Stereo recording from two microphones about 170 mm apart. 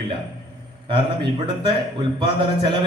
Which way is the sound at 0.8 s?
30° right (ahead or behind).